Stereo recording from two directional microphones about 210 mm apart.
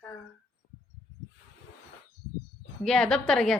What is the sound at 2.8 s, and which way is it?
Speech, 5° left (ahead or behind).